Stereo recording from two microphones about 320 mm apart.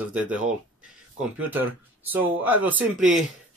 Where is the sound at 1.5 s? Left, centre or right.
Centre.